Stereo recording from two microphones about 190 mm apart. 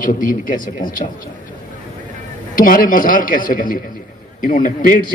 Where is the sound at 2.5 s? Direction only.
45° left (ahead or behind).